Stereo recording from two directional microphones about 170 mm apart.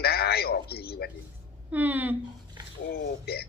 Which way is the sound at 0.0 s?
70° left (ahead or behind).